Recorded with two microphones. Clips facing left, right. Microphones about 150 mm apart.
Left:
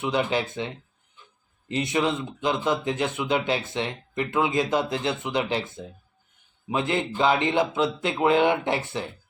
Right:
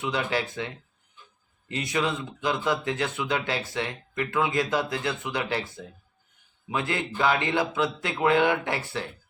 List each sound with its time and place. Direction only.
0.0 s speech: 20° left (ahead or behind)